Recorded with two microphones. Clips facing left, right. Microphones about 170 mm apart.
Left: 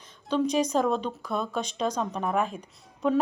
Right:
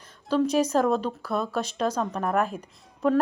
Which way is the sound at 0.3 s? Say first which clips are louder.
Right 2 dB; 5° right (ahead or behind).